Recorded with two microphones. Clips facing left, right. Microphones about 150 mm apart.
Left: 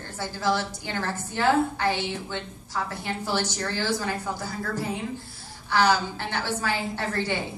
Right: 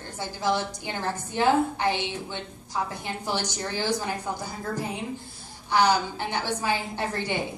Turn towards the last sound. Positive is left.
turn(degrees=-15)  # may be behind; listen again after turning